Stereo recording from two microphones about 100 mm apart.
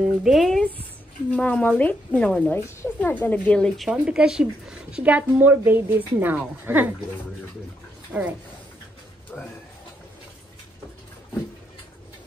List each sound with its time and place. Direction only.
0.2 s speech: centre (ahead or behind)
1.3 s a woman's voice: 15° left (ahead or behind); by 6.9 s 15° right (ahead or behind)
8.1 s a woman's voice: 10° right (ahead or behind)